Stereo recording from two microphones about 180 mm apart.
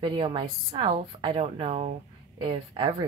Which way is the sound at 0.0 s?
25° right (ahead or behind).